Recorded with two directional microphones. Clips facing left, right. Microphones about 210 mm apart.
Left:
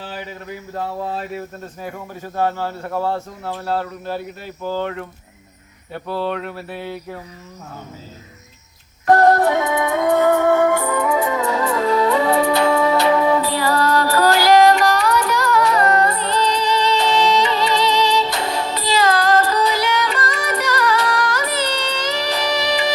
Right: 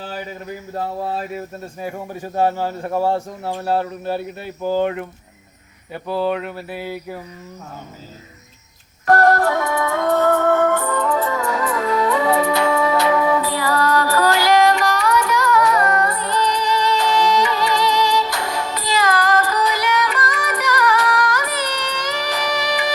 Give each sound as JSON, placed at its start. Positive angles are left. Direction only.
{"t": 1.8, "sound": "a man's voice", "side_deg": -15}
{"t": 5.9, "sound": "a sound", "side_deg": 0}
{"t": 9.1, "sound": "music", "side_deg": 20}